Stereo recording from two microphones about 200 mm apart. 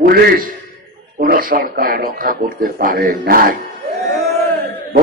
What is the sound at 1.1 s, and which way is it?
A man's voice, 45° right (ahead or behind).